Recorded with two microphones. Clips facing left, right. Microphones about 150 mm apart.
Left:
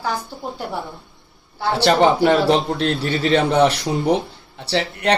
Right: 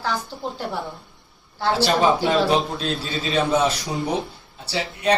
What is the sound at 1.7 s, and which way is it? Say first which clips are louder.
Speech: left 4 dB; 70° left (ahead or behind).